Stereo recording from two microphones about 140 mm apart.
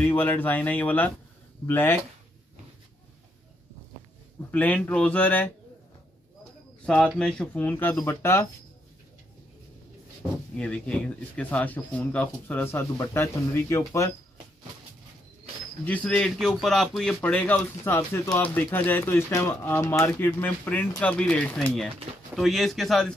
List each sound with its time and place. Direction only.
0.0 s speech: 15° left (ahead or behind)
4.5 s speech: 10° left (ahead or behind)
7.2 s speech: 5° left (ahead or behind)
10.5 s speech: 10° left (ahead or behind)
15.8 s speech: 10° left (ahead or behind)